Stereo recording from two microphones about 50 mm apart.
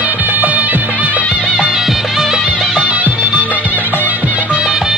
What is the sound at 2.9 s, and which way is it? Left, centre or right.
Music, right.